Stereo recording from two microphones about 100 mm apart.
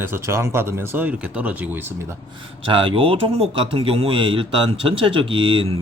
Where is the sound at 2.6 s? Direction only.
60° right (ahead or behind).